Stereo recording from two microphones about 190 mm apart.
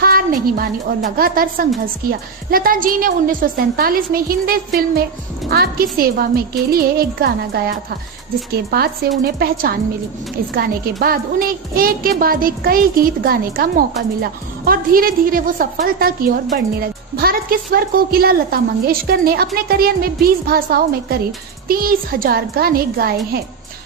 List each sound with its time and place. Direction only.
0.0 s a woman's voice: 50° right (ahead or behind)